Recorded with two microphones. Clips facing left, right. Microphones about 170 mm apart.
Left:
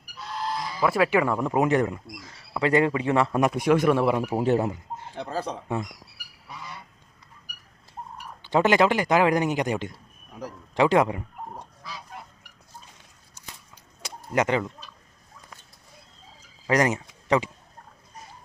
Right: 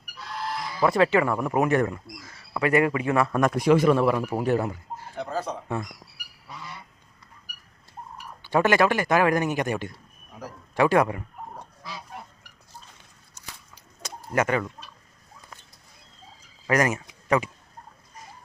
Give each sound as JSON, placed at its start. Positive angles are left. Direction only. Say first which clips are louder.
{"t": 0.8, "sound": "speech", "louder": "right 2 dB", "side_deg": 5}
{"t": 3.4, "sound": "a man's voice", "louder": "right 3 dB", "side_deg": 5}
{"t": 3.9, "sound": "speech", "louder": "even", "side_deg": 15}
{"t": 5.6, "sound": "speech", "louder": "left 1 dB", "side_deg": 15}
{"t": 8.4, "sound": "speech", "louder": "left 1 dB", "side_deg": 20}
{"t": 14.0, "sound": "a sound", "louder": "left 1 dB", "side_deg": 20}
{"t": 16.6, "sound": "speech", "louder": "left 1 dB", "side_deg": 20}